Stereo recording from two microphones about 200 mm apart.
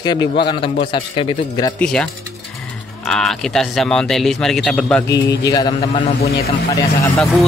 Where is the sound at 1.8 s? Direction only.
5° left (ahead or behind).